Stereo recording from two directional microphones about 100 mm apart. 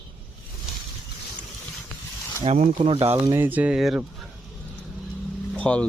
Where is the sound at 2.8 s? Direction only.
65° right (ahead or behind).